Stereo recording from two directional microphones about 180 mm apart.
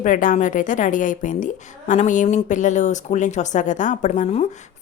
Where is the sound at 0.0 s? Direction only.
50° left (ahead or behind).